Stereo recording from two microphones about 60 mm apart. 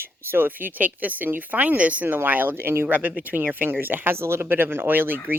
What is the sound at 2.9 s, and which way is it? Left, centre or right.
Speech, right.